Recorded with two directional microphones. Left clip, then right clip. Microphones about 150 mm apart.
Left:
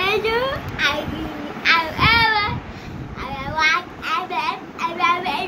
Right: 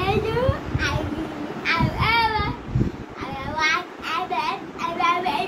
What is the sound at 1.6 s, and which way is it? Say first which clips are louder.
Child singing: left 6 dB; 20° left (ahead or behind).